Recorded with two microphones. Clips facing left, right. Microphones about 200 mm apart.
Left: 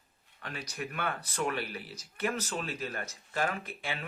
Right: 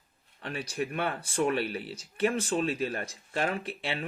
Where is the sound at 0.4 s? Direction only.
30° right (ahead or behind).